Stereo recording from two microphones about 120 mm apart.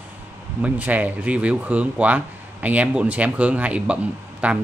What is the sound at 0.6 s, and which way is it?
Speech, 15° right (ahead or behind).